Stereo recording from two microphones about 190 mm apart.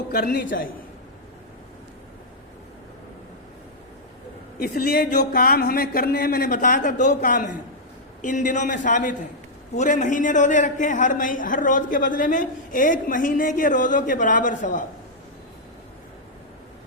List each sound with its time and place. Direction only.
0.1 s a man's voice: 55° left (ahead or behind)
4.6 s a man's voice: 55° left (ahead or behind)